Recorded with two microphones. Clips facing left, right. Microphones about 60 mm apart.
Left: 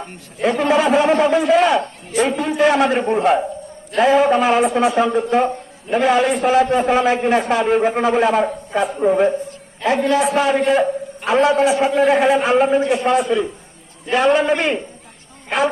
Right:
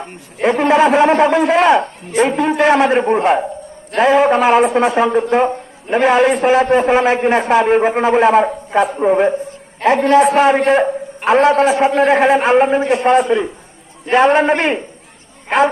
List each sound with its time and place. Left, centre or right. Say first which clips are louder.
0.4 s a man's voice: right 4 dB; right
9.8 s a man's voice: right 6 dB; right